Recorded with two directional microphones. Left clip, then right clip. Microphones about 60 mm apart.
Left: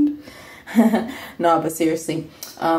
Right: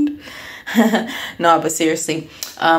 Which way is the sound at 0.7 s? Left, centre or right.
Centre.